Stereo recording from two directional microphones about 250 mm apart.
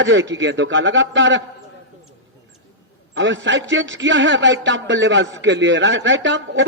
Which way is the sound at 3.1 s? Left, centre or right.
Right.